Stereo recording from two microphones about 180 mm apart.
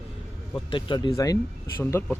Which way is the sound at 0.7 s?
25° left (ahead or behind).